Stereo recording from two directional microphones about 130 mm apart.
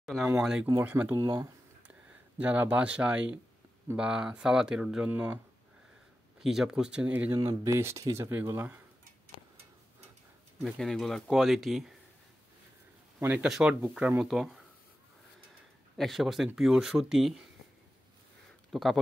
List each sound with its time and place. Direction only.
0.0 s speech: centre (ahead or behind)
1.2 s speech: 30° right (ahead or behind)
2.3 s speech: 15° right (ahead or behind)
6.4 s speech: 5° right (ahead or behind)
7.3 s speech: 25° right (ahead or behind)
10.6 s speech: centre (ahead or behind)
13.2 s speech: 15° right (ahead or behind)
16.0 s speech: centre (ahead or behind)
18.7 s speech: centre (ahead or behind)